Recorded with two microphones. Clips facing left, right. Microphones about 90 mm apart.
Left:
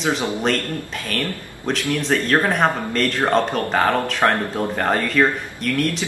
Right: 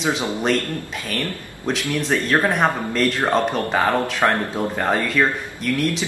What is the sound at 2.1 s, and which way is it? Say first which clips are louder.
Speech: even; 15° right (ahead or behind).